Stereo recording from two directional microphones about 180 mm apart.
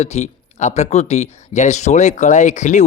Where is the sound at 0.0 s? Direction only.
35° left (ahead or behind).